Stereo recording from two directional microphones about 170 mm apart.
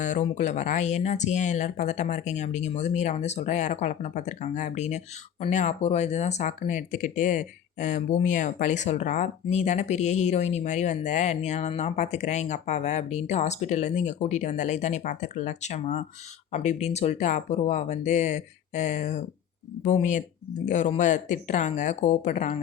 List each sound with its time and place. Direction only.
0.0 s speech: 45° left (ahead or behind)